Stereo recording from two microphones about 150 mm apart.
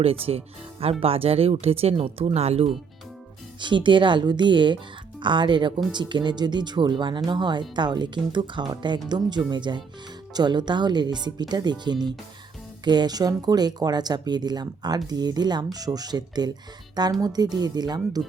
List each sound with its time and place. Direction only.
0.0 s speech: 40° right (ahead or behind)
3.6 s speech: 30° right (ahead or behind)